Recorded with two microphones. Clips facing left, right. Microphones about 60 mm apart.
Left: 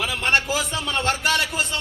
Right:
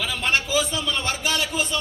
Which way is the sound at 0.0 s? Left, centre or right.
Left.